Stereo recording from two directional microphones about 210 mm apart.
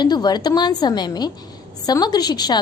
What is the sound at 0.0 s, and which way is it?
A woman's voice, 20° left (ahead or behind).